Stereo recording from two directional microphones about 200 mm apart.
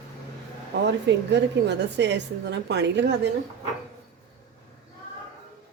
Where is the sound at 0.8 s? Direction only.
60° right (ahead or behind).